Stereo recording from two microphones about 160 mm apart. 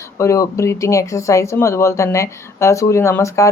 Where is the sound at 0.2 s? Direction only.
20° left (ahead or behind).